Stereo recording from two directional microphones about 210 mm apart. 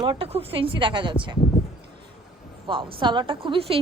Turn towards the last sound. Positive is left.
turn(degrees=-25)  # may be behind; listen again after turning